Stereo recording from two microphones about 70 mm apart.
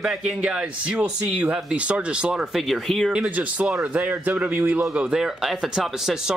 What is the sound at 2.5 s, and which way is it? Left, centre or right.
Speech, centre.